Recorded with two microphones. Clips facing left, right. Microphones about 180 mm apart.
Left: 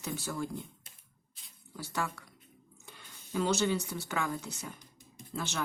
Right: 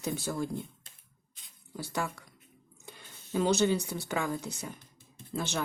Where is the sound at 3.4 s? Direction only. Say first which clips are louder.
Right 3 dB; 20° right (ahead or behind).